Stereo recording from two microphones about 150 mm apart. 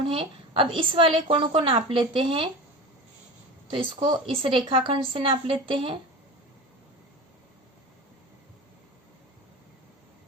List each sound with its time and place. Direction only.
0.0 s a woman's voice: 35° right (ahead or behind)
3.7 s a woman's voice: 35° right (ahead or behind)